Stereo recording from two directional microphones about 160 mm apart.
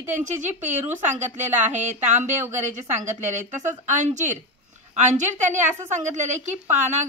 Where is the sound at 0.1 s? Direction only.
50° right (ahead or behind).